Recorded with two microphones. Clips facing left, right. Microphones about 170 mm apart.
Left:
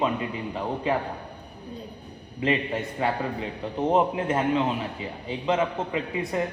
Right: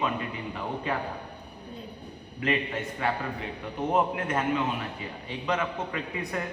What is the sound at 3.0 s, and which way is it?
A man's voice, 25° left (ahead or behind).